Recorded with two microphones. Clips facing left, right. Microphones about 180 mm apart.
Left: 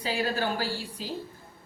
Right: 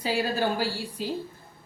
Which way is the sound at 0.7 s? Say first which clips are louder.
Right 2 dB; 15° left (ahead or behind).